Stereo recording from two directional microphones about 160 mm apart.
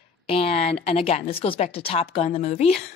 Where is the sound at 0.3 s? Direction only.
40° left (ahead or behind).